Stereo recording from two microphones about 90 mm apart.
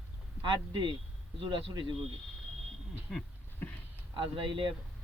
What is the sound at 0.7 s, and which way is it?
Speech, 55° right (ahead or behind).